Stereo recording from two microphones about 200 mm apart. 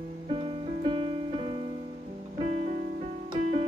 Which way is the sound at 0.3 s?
25° right (ahead or behind).